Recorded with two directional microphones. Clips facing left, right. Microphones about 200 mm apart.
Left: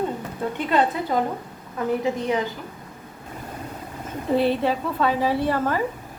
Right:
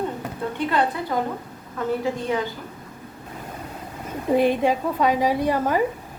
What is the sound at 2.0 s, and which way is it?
Speech, 20° left (ahead or behind).